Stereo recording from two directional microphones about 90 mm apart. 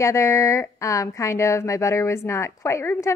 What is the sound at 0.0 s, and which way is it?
A woman's voice, 30° left (ahead or behind).